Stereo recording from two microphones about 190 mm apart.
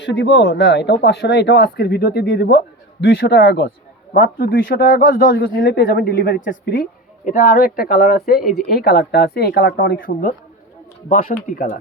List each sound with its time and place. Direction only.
0.0 s speech: 70° left (ahead or behind)
4.1 s speech: 50° left (ahead or behind)
4.8 s speech: 70° left (ahead or behind)
5.6 s speech: 55° left (ahead or behind)
8.4 s speech: centre (ahead or behind)
8.7 s speech: 55° left (ahead or behind)